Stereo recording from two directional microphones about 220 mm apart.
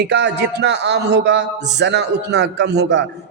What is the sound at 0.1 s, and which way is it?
A man's voice, 50° right (ahead or behind).